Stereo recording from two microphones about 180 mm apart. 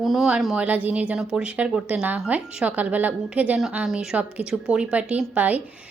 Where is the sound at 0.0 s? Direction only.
Centre (ahead or behind).